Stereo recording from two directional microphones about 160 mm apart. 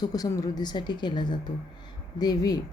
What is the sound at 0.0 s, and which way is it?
Speech, 25° left (ahead or behind).